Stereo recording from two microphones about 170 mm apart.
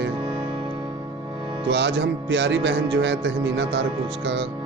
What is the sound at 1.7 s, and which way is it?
Speech, 90° right.